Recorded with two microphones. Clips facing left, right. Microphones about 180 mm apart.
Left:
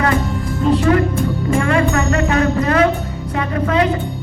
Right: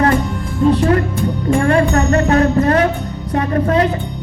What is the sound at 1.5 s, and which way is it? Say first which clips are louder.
A man's voice: right 3 dB; 35° right (ahead or behind).